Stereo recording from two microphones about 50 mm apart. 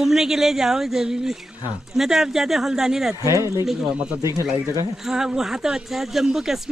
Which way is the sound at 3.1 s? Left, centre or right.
Right.